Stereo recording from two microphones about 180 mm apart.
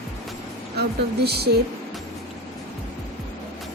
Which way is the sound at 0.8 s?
65° right (ahead or behind).